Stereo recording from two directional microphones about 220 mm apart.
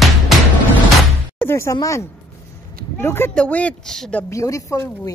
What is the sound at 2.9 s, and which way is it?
Speech, 10° left (ahead or behind).